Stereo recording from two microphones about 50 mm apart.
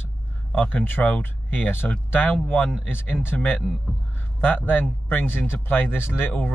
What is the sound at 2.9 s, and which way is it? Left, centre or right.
Speech, left.